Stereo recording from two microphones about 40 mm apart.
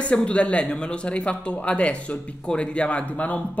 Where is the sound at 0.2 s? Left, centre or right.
Left.